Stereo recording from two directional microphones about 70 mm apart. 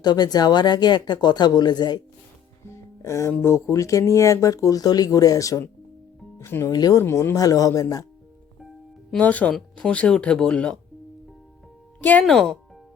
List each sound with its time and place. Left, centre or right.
0.0 s speech: left
2.6 s music: left
3.4 s speech: left
6.7 s speech: left
7.0 s speech: left
7.3 s speech: left
9.1 s speech: left
11.9 s speech: left
12.2 s speech: centre